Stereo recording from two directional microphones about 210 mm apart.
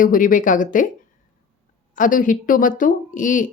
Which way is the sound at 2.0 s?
40° left (ahead or behind).